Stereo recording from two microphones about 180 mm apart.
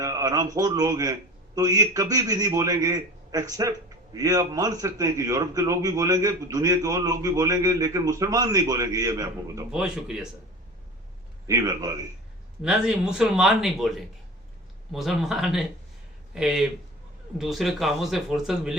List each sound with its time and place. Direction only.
0.0 s a man's voice: 20° right (ahead or behind)
9.7 s speech: 5° right (ahead or behind)
11.4 s a man's voice: 20° right (ahead or behind)
12.6 s speech: 5° right (ahead or behind)